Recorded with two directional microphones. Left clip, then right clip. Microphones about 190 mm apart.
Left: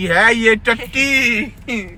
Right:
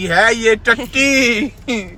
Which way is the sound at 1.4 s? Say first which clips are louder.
Right 2 dB; 60° right (ahead or behind).